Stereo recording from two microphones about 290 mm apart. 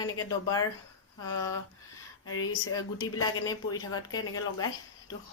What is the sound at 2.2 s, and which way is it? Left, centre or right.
Speech, left.